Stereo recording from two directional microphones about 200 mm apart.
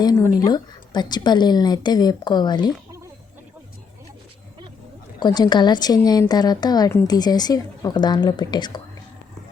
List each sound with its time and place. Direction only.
0.0 s a woman's voice: 20° left (ahead or behind)
5.2 s a woman's voice: 20° left (ahead or behind)